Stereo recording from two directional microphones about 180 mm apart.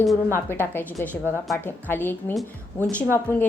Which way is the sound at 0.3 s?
15° left (ahead or behind).